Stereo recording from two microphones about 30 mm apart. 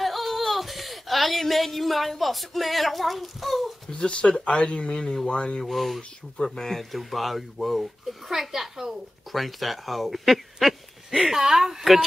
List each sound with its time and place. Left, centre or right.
0.0 s speech: centre
3.9 s speech: left
5.2 s speech: left
5.7 s a woman's voice: centre
9.3 s a woman's voice: centre